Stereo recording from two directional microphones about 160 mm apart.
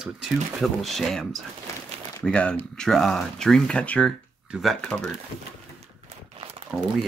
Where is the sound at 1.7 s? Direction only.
20° left (ahead or behind).